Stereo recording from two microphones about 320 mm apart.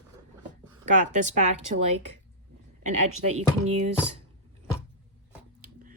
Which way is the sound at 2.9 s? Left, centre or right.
Right.